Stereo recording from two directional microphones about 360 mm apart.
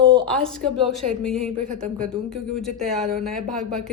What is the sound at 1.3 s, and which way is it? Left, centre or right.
Speech, left.